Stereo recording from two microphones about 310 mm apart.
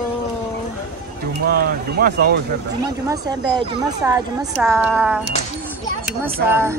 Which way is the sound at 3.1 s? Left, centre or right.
Centre.